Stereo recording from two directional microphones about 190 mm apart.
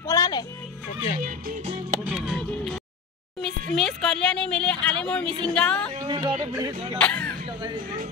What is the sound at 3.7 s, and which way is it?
Speech, centre (ahead or behind).